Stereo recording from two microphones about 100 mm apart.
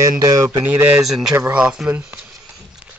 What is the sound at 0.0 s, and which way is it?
Speech, 35° right (ahead or behind).